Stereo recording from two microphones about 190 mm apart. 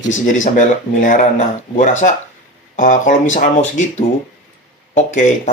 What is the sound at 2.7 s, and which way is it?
Speech, 40° left (ahead or behind).